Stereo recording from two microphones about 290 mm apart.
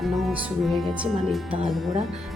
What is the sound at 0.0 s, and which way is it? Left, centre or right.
Speech, centre.